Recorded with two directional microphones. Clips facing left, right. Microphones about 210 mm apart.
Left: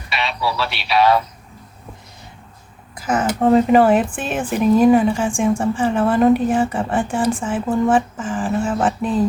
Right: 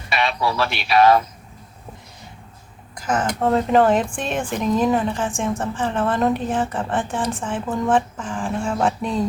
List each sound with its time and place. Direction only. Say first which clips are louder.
0.1 s speech: right 1 dB; 50° right (ahead or behind)
2.9 s speech: left 3 dB; 5° left (ahead or behind)